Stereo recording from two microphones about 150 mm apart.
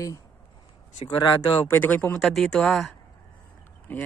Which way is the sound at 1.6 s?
10° left (ahead or behind).